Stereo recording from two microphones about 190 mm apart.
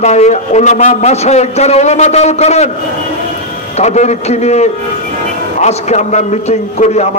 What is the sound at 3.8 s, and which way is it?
A man's voice, 35° left (ahead or behind).